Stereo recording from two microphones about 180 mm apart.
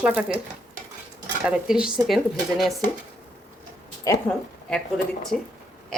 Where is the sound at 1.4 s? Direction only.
5° right (ahead or behind).